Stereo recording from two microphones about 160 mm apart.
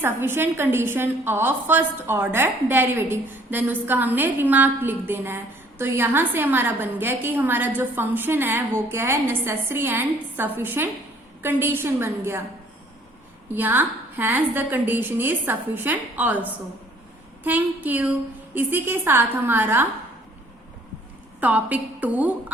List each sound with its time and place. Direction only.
0.0 s a woman's voice: 15° right (ahead or behind)
13.5 s a woman's voice: 10° right (ahead or behind)
21.4 s a woman's voice: 10° right (ahead or behind)